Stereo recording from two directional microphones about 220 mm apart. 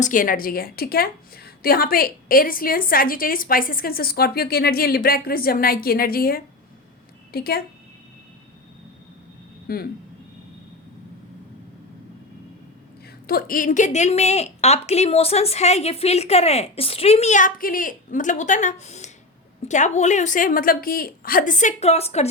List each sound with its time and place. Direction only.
0.0 s a woman's voice: 40° left (ahead or behind)
9.7 s a woman's voice: 40° left (ahead or behind)
13.2 s a woman's voice: 40° left (ahead or behind)